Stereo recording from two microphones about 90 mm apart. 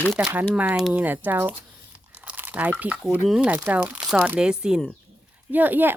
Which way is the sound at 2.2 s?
20° right (ahead or behind).